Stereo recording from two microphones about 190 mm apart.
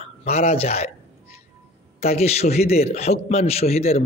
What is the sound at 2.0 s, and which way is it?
A man's voice, 35° left (ahead or behind).